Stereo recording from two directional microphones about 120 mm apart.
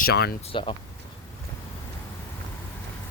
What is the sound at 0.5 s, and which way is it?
Speech, 45° left (ahead or behind).